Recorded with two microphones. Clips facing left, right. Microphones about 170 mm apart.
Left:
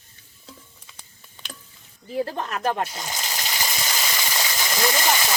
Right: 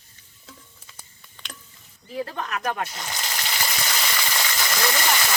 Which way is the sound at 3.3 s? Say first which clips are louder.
Right 2 dB; 15° left (ahead or behind).